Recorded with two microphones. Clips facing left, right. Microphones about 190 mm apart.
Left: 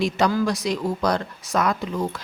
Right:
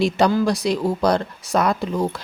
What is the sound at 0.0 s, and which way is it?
Speech, 30° right (ahead or behind).